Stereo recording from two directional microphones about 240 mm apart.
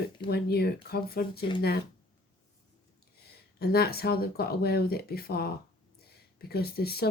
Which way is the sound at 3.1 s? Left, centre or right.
Left.